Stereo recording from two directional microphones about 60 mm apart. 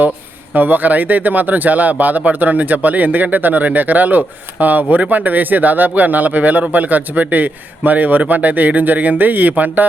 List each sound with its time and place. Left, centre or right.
0.5 s speech: right